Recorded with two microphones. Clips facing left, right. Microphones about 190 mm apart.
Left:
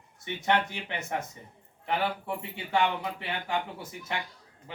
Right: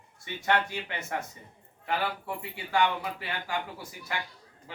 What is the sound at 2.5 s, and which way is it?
A man's voice, 25° left (ahead or behind).